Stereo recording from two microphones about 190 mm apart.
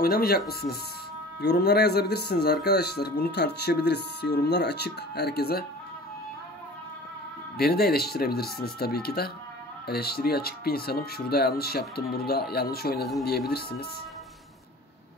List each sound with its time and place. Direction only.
0.0 s speech: 50° left (ahead or behind)
7.5 s speech: 55° left (ahead or behind)